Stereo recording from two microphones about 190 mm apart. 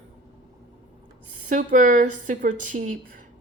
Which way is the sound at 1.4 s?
40° right (ahead or behind).